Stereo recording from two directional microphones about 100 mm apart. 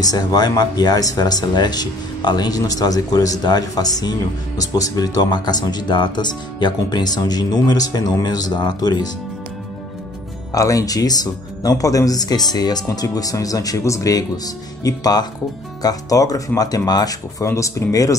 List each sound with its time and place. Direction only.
0.0 s speech: 40° left (ahead or behind)
10.5 s speech: 35° left (ahead or behind)